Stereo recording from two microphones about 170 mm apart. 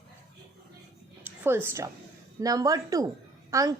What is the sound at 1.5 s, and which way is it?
A woman's voice, 15° right (ahead or behind).